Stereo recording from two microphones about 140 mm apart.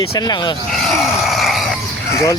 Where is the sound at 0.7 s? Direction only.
Centre (ahead or behind).